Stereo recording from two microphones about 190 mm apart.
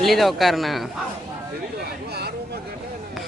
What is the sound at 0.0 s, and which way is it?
Speech, centre (ahead or behind).